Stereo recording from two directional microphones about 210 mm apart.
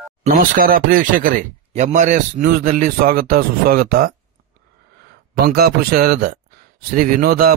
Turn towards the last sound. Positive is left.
turn(degrees=-45)  # may be behind; listen again after turning